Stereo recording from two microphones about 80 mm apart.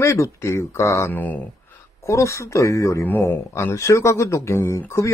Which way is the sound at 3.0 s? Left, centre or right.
Left.